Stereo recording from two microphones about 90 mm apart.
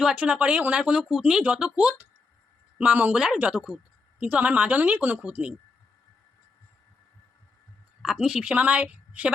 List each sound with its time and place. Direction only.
0.0 s speech: 15° right (ahead or behind)
8.0 s speech: 5° right (ahead or behind)